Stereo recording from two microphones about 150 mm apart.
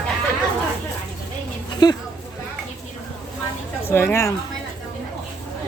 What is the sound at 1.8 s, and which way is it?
Speech, 30° left (ahead or behind).